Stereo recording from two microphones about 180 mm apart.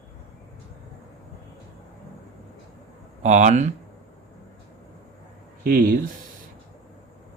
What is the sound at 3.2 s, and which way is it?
Speech, 40° right (ahead or behind).